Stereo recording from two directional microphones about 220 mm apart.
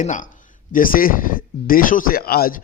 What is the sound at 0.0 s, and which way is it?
A man's voice, 35° left (ahead or behind).